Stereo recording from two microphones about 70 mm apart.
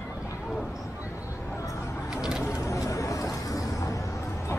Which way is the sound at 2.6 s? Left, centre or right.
Left.